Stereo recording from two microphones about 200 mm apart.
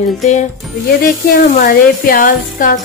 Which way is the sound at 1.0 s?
40° left (ahead or behind).